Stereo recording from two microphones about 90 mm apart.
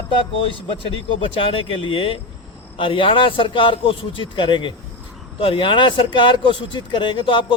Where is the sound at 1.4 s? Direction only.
80° left.